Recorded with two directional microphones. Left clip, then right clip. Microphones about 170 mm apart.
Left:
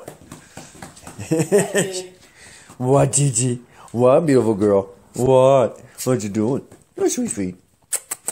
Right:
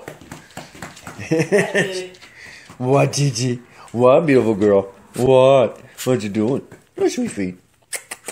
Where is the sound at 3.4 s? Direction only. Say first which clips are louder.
Right 1 dB; 15° left (ahead or behind).